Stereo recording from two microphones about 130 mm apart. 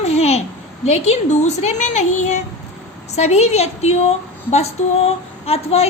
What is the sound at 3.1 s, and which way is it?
Speech, 55° left (ahead or behind).